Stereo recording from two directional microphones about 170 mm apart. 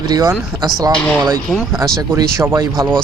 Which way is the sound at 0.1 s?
25° right (ahead or behind).